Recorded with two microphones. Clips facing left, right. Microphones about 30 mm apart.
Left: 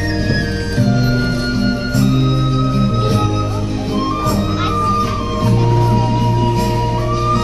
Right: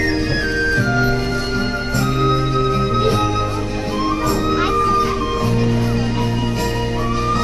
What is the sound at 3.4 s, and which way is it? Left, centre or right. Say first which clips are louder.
Music: left 1 dB; centre.